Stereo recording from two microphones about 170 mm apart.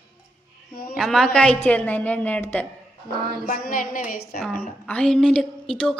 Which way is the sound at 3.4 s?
55° left (ahead or behind).